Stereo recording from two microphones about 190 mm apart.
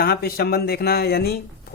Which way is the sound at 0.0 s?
55° left (ahead or behind).